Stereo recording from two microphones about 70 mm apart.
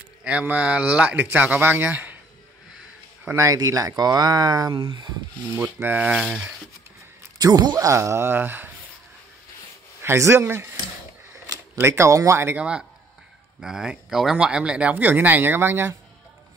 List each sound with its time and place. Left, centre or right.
0.2 s speech: centre
3.3 s speech: right
5.5 s speech: right
5.9 s speech: centre
7.3 s speech: right
7.8 s speech: right
10.0 s speech: right
11.8 s speech: right
12.5 s speech: centre; by 16.0 s right